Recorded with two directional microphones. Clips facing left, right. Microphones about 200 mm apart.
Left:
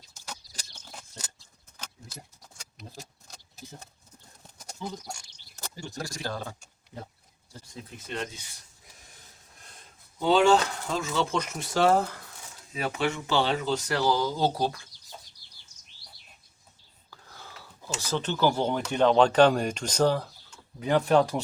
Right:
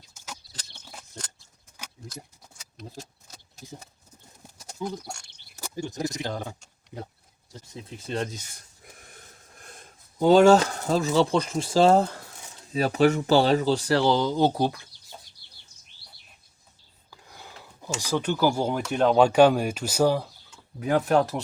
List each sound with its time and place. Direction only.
3.2 s a sound: 5° right (ahead or behind)
5.5 s speech: 15° right (ahead or behind)
7.5 s a sound: 25° right (ahead or behind); by 9.7 s 55° right (ahead or behind)
10.2 s speech: 45° right (ahead or behind); by 14.8 s 15° right (ahead or behind)
15.4 s bird: 60° right (ahead or behind)
17.1 s speech: 15° right (ahead or behind)